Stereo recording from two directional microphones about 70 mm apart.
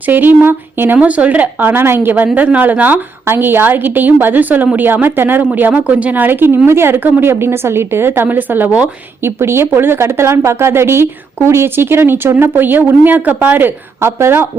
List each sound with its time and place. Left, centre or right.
0.0 s a woman's voice: right
0.9 s a woman's voice: centre
9.2 s speech: right